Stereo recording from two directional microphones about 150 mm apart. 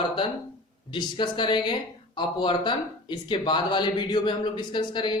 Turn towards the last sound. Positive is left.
turn(degrees=30)  # may be behind; listen again after turning